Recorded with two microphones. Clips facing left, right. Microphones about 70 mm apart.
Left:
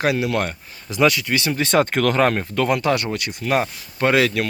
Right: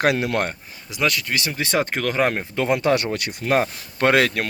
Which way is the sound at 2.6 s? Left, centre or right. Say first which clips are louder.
Right 1 dB; right.